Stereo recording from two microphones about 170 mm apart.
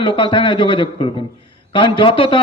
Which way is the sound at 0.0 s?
30° left (ahead or behind).